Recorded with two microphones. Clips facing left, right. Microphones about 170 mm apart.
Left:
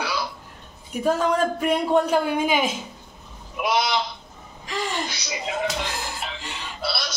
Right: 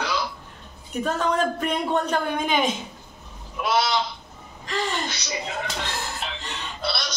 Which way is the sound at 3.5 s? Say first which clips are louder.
Even; 15° left (ahead or behind).